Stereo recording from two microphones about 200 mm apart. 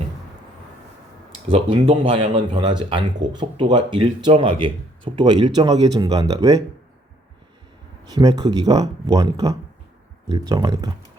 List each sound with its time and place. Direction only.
1.5 s speech: 25° right (ahead or behind)
8.1 s speech: 20° right (ahead or behind)